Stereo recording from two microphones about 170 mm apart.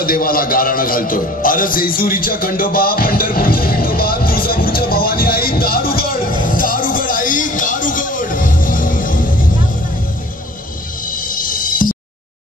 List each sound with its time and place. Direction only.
0.0 s music: 60° left (ahead or behind)
11.1 s music: 55° left (ahead or behind)